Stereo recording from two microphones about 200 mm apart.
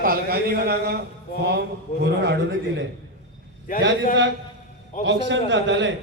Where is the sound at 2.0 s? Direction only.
55° right (ahead or behind).